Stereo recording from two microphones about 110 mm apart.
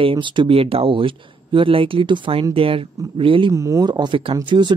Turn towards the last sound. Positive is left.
turn(degrees=-45)  # may be behind; listen again after turning